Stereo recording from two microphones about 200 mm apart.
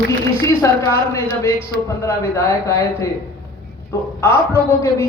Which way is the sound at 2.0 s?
15° left (ahead or behind).